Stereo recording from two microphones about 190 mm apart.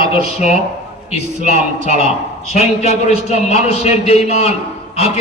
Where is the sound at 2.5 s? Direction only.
45° left (ahead or behind).